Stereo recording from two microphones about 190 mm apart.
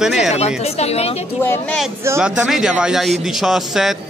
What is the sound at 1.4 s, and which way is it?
Speech, 10° left (ahead or behind).